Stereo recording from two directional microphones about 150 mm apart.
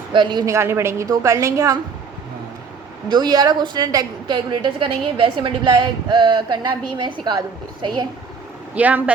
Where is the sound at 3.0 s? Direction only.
30° right (ahead or behind).